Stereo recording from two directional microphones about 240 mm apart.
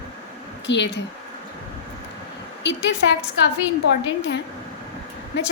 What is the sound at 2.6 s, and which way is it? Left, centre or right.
Speech, left.